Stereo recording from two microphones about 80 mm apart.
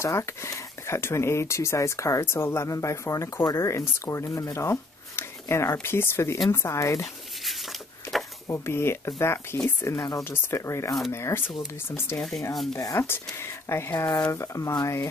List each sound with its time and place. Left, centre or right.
0.0 s speech: left
8.5 s speech: left
12.2 s speech: centre
12.7 s speech: left